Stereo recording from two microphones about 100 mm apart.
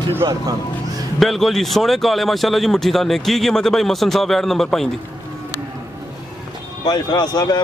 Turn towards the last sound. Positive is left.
turn(degrees=45)  # may be behind; listen again after turning